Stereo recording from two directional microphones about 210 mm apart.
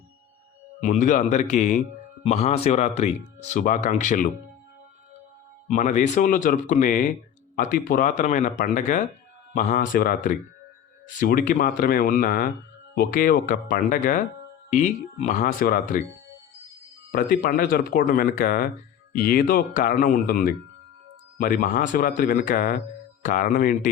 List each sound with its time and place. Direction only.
0.8 s speech: 35° left (ahead or behind)
5.6 s speech: 35° left (ahead or behind)
17.1 s speech: 45° left (ahead or behind)